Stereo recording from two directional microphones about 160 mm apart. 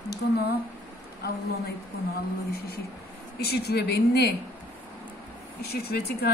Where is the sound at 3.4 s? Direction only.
90° left.